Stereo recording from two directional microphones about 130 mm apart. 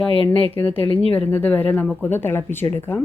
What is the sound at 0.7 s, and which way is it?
Speech, 45° left (ahead or behind).